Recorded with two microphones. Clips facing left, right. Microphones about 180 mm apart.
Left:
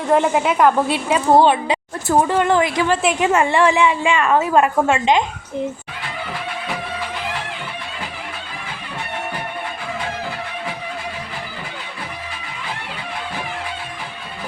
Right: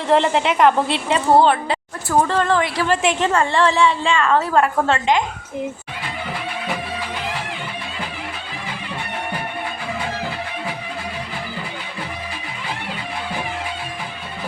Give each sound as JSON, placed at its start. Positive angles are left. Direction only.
{"t": 0.1, "sound": "a woman's voice", "side_deg": 5}
{"t": 3.0, "sound": "a woman's voice", "side_deg": 5}